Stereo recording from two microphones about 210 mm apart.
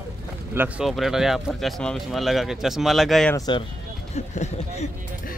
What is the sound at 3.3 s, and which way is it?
Speech, 15° left (ahead or behind).